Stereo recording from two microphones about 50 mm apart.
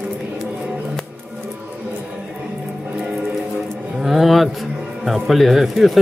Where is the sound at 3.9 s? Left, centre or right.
Centre.